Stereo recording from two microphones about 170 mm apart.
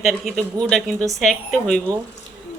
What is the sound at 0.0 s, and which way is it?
Speech, 5° left (ahead or behind).